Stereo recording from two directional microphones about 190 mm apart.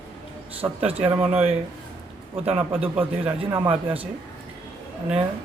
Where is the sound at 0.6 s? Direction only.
20° right (ahead or behind).